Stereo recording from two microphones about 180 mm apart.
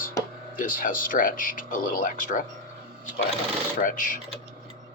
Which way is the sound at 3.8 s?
50° left (ahead or behind).